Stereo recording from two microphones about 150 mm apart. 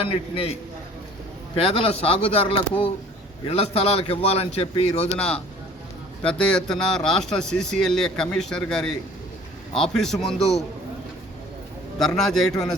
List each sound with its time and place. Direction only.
0.0 s speech: 40° left (ahead or behind)
1.5 s speech: 40° left (ahead or behind)
5.1 s speech: 5° left (ahead or behind)
11.9 s speech: centre (ahead or behind)